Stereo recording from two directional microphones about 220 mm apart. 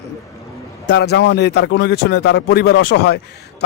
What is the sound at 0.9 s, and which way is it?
Speech, 50° left (ahead or behind).